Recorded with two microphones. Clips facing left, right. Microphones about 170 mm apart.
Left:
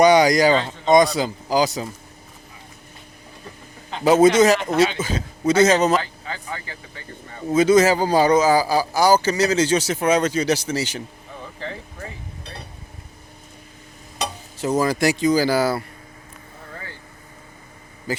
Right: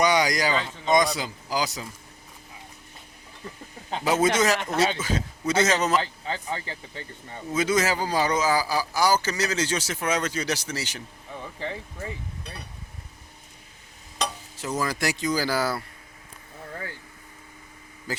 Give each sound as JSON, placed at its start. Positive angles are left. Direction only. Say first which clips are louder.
{"t": 0.0, "sound": "speech", "louder": "left 8 dB", "side_deg": 30}
{"t": 4.0, "sound": "a man's voice", "louder": "left 9 dB", "side_deg": 45}
{"t": 4.4, "sound": "speech", "louder": "left 7 dB", "side_deg": 25}
{"t": 6.0, "sound": "speech", "louder": "right 1 dB", "side_deg": -25}
{"t": 7.5, "sound": "speech", "louder": "left 9 dB", "side_deg": 25}
{"t": 11.6, "sound": "speech", "louder": "left 1 dB", "side_deg": -15}
{"t": 14.6, "sound": "speech", "louder": "left 8 dB", "side_deg": 30}